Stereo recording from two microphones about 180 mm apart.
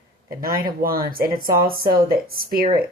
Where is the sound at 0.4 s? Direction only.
55° right (ahead or behind).